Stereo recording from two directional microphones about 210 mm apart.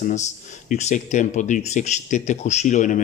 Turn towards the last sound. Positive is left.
turn(degrees=35)  # may be behind; listen again after turning